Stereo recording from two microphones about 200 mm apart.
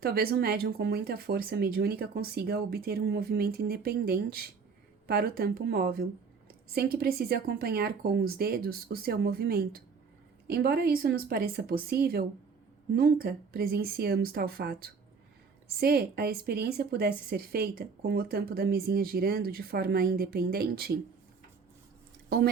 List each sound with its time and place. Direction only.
0.0 s a woman's voice: 50° right (ahead or behind)